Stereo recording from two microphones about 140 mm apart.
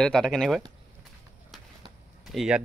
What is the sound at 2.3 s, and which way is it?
Speech, 5° right (ahead or behind).